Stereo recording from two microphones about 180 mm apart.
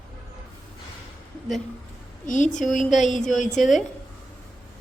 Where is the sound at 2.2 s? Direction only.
45° left (ahead or behind).